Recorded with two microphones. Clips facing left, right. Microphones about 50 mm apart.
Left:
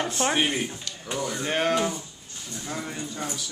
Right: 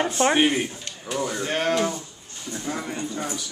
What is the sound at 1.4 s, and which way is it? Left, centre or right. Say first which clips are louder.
Speech: even; centre.